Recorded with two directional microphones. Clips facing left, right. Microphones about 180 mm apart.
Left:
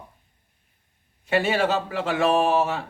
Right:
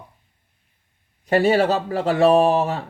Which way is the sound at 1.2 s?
40° right (ahead or behind).